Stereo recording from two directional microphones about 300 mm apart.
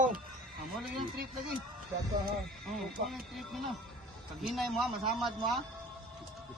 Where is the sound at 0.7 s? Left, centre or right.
Centre.